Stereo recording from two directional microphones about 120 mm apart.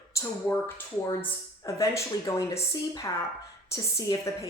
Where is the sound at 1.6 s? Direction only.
25° left (ahead or behind).